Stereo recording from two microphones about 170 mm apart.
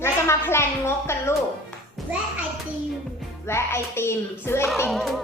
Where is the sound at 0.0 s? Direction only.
15° left (ahead or behind).